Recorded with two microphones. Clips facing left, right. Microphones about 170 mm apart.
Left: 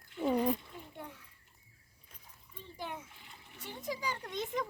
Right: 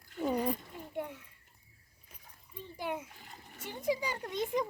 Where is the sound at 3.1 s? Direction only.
45° right (ahead or behind).